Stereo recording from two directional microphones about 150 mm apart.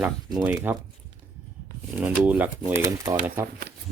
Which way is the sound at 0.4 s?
10° right (ahead or behind).